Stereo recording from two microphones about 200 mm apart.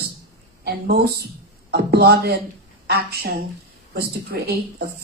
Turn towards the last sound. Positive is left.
turn(degrees=-50)  # may be behind; listen again after turning